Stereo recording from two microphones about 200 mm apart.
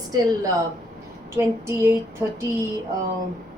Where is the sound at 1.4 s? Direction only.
15° right (ahead or behind).